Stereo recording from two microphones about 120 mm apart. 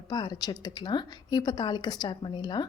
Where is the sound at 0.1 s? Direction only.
35° left (ahead or behind).